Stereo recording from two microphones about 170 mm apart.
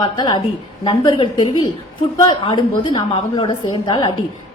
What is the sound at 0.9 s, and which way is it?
A woman's voice, 30° left (ahead or behind).